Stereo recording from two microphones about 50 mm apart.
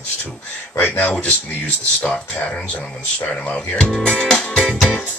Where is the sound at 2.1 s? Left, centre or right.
Centre.